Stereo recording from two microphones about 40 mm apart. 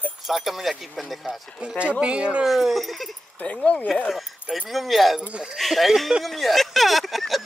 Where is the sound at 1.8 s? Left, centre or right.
Right.